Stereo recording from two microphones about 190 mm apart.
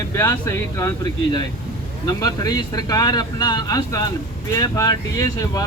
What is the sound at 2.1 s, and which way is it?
Speech, 20° left (ahead or behind).